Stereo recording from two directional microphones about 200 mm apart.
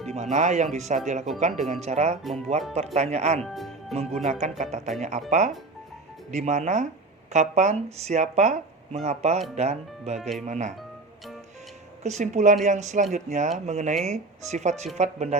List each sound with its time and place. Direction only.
0.1 s speech: 35° right (ahead or behind)
3.4 s music: centre (ahead or behind)
4.1 s speech: 35° right (ahead or behind)
6.3 s speech: 35° right (ahead or behind)
10.2 s speech: centre (ahead or behind)
10.4 s speech: 35° right (ahead or behind)
12.0 s speech: 35° right (ahead or behind)